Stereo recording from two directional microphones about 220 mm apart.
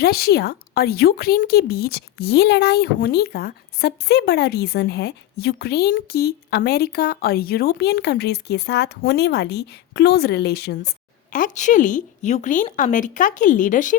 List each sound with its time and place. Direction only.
0.0 s a woman's voice: 45° left (ahead or behind)